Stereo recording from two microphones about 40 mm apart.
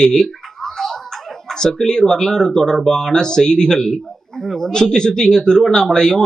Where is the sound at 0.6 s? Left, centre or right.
Centre.